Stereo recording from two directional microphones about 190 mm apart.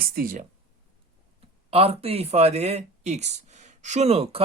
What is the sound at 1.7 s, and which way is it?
Speech, 30° right (ahead or behind).